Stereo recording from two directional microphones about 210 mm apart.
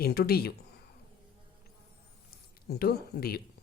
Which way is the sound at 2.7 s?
50° left (ahead or behind).